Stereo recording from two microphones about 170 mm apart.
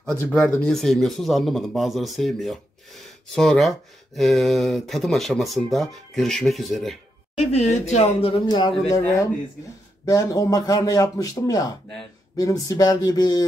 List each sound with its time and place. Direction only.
0.1 s speech: 10° left (ahead or behind)
7.3 s speech: 40° left (ahead or behind)
8.5 s a man's voice: 25° left (ahead or behind)
10.0 s a man's voice: 20° left (ahead or behind)